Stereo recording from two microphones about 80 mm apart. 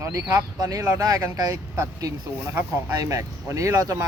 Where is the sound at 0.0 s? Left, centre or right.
Right.